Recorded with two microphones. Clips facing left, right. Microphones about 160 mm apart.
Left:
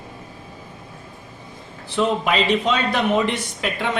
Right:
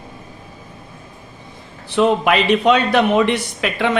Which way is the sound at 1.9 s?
65° right (ahead or behind).